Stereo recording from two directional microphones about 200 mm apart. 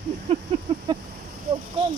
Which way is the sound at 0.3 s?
30° right (ahead or behind).